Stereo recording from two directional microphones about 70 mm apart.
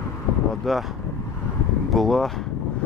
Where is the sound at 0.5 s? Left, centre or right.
Centre.